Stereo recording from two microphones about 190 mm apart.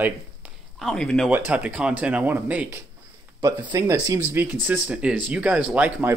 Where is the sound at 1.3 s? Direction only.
10° right (ahead or behind).